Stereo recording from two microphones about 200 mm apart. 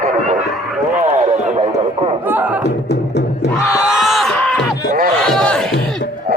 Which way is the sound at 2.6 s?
60° left (ahead or behind).